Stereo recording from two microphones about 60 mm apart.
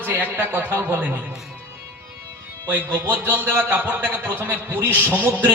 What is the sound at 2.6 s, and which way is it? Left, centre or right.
A man's voice, right.